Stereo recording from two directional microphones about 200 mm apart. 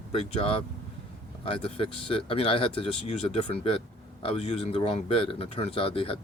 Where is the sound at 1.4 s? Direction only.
25° left (ahead or behind).